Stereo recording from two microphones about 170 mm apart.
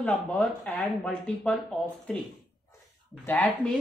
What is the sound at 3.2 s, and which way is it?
Speech, 10° left (ahead or behind).